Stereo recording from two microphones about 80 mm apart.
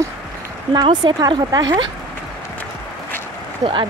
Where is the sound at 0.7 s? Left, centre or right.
Right.